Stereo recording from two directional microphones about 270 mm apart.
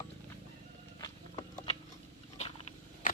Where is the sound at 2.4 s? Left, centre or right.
Left.